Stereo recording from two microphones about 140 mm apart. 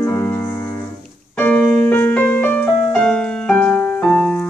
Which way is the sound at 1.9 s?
15° left (ahead or behind).